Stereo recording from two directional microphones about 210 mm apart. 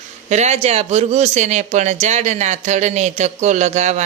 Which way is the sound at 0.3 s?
35° right (ahead or behind).